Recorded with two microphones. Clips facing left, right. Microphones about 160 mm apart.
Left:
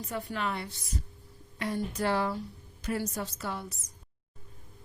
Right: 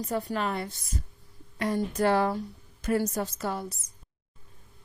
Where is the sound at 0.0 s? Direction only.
40° right (ahead or behind).